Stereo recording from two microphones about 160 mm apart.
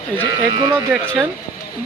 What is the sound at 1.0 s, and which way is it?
Speech, 10° left (ahead or behind).